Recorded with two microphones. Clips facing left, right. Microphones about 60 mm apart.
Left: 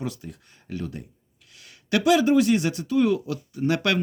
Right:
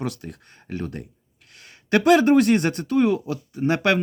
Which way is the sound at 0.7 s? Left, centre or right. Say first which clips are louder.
Right 2 dB; right.